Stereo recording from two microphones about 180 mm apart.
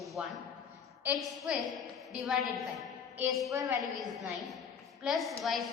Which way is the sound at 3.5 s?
15° right (ahead or behind).